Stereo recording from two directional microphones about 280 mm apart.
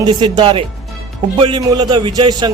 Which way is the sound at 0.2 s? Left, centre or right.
Centre.